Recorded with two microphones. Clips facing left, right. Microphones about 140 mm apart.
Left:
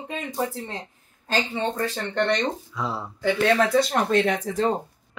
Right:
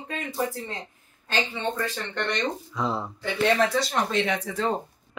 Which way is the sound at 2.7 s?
5° left (ahead or behind).